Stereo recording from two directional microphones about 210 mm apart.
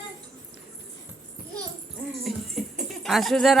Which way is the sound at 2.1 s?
Centre (ahead or behind).